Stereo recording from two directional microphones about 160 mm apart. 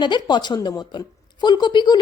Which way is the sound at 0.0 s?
30° left (ahead or behind).